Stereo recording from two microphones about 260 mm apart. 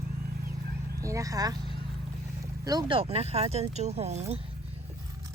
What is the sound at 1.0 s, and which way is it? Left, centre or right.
Speech, centre.